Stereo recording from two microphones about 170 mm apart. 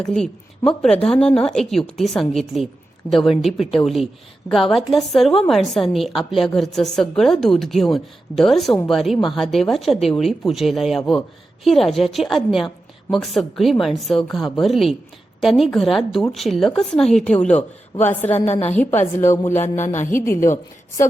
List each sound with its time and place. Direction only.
0.0 s a woman's voice: 5° left (ahead or behind)
19.6 s speech: 45° left (ahead or behind)